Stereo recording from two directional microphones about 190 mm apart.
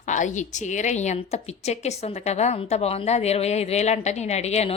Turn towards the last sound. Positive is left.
turn(degrees=35)  # may be behind; listen again after turning